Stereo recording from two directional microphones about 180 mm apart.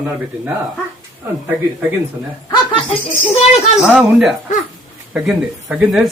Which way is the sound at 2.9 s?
30° left (ahead or behind).